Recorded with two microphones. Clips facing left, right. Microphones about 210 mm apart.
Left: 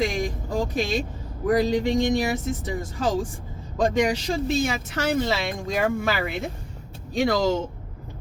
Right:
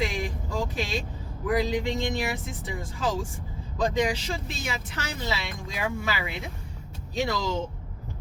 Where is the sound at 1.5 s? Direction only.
45° left (ahead or behind).